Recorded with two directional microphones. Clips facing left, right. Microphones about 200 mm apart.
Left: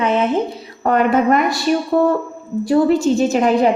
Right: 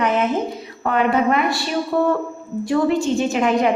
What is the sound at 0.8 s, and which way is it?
Speech, 45° left (ahead or behind).